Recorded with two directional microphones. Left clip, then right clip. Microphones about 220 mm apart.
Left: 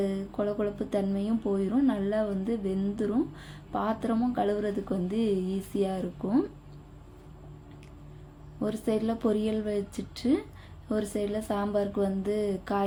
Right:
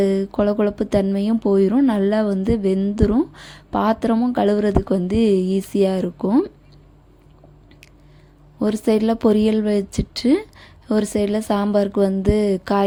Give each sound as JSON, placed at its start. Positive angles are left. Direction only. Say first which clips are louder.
{"t": 0.0, "sound": "speech", "louder": "right 12 dB", "side_deg": -40}
{"t": 8.5, "sound": "speech", "louder": "right 11 dB", "side_deg": -40}